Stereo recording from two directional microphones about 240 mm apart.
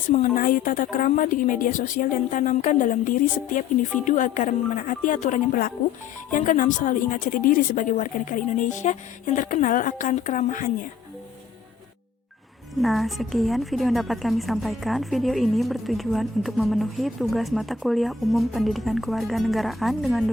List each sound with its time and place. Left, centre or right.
0.1 s speech: left
12.8 s a woman's voice: centre